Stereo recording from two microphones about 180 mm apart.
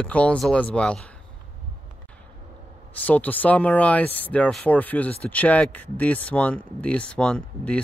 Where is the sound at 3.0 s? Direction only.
10° left (ahead or behind).